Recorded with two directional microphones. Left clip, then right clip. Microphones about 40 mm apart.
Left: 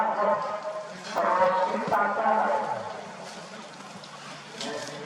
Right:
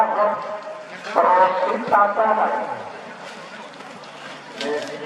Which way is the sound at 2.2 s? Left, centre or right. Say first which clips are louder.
Right 5 dB; right.